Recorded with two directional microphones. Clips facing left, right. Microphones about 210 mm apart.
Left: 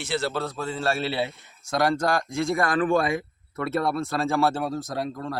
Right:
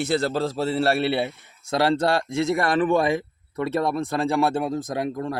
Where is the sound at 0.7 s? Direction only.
65° right (ahead or behind).